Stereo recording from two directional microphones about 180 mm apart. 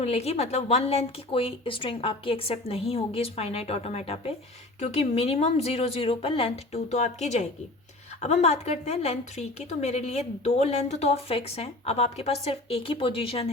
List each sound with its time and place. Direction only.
0.0 s a woman's voice: 35° left (ahead or behind)